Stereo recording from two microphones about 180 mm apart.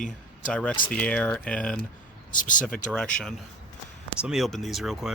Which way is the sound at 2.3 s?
45° left (ahead or behind).